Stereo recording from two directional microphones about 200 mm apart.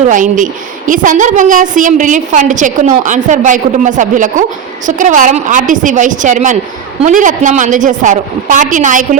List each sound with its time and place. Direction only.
0.0 s a woman's voice: 40° right (ahead or behind)